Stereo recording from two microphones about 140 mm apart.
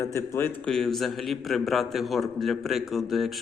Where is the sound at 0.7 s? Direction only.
Centre (ahead or behind).